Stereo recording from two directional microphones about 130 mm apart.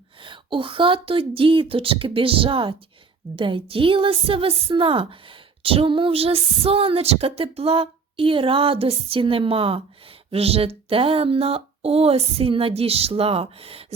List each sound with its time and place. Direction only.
0.2 s a woman's voice: 40° right (ahead or behind)